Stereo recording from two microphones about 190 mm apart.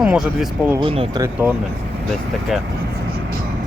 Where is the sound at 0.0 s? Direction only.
5° right (ahead or behind).